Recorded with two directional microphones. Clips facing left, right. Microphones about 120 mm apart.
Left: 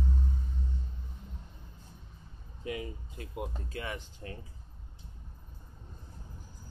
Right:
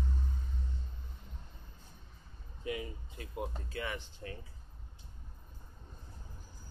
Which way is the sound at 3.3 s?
10° left (ahead or behind).